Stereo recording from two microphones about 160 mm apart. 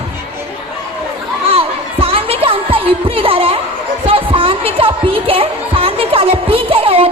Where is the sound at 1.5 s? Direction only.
35° right (ahead or behind).